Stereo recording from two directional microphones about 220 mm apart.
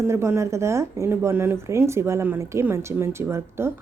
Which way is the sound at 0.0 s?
10° right (ahead or behind).